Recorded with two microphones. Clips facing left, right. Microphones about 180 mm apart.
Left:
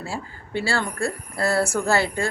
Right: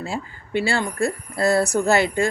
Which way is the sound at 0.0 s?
20° right (ahead or behind).